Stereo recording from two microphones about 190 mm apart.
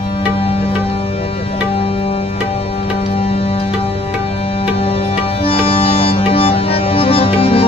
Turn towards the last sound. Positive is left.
turn(degrees=30)  # may be behind; listen again after turning